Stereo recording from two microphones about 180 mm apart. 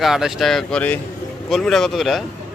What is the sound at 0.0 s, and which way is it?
Speech, centre (ahead or behind).